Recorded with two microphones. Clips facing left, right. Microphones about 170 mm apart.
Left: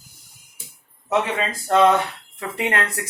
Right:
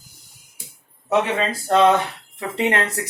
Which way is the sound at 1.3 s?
35° right (ahead or behind).